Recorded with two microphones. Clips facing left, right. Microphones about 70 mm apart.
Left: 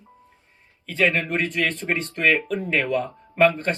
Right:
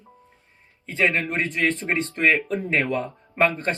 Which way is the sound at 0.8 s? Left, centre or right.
Right.